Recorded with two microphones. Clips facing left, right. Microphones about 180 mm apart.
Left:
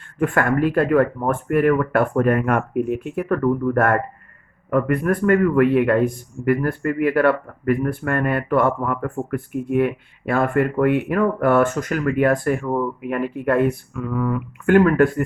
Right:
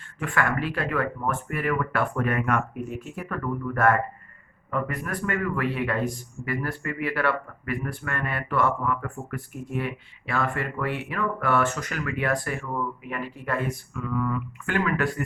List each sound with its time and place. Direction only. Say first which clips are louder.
0.2 s a man's voice: left 8 dB; 50° left (ahead or behind)